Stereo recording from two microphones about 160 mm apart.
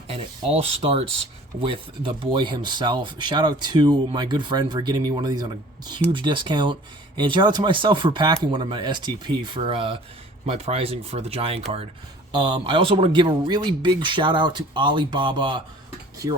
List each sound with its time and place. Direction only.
0.1 s speech: 35° right (ahead or behind)
12.3 s speech: 25° right (ahead or behind)